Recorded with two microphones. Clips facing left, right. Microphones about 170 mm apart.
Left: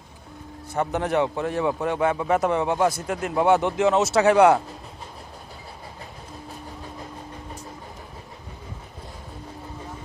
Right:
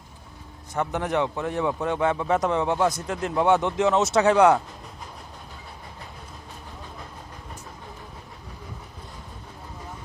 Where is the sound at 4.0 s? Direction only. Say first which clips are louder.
Left 1 dB; 20° right (ahead or behind).